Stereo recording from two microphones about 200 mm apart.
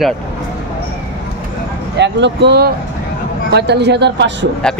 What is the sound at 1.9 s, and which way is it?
A man's voice, 60° right (ahead or behind).